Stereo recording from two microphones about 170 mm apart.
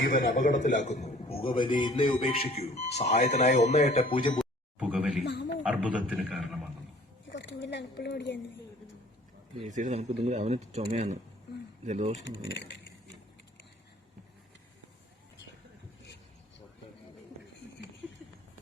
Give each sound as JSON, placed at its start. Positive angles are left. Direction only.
{"t": 0.4, "sound": "a man's voice", "side_deg": 50}
{"t": 4.4, "sound": "a sound", "side_deg": -5}
{"t": 5.2, "sound": "a man's voice", "side_deg": 90}
{"t": 5.6, "sound": "a man's voice", "side_deg": -10}
{"t": 7.3, "sound": "a sound", "side_deg": 85}
{"t": 9.6, "sound": "speech", "side_deg": -45}